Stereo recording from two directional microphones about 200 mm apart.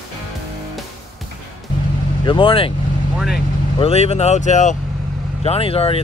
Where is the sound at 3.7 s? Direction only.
30° left (ahead or behind).